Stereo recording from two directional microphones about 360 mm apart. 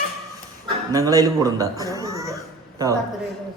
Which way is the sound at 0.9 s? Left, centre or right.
Centre.